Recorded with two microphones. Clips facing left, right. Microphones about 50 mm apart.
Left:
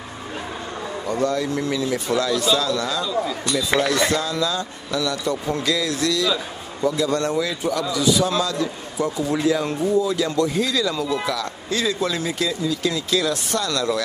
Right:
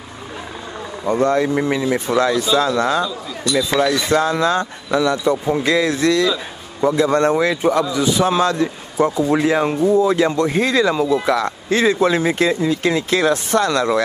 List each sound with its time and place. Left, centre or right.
1.0 s a man's voice: right
4.1 s a man's voice: right